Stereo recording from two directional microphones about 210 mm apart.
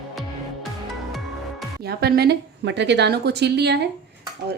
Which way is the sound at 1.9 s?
50° right (ahead or behind).